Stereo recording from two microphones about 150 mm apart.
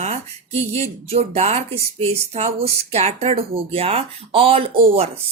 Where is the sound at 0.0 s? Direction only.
45° right (ahead or behind).